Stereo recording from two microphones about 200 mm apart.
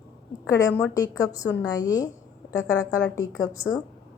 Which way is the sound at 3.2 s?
15° left (ahead or behind).